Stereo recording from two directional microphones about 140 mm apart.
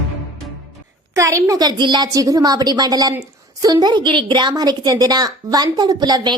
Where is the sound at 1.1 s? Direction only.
20° right (ahead or behind).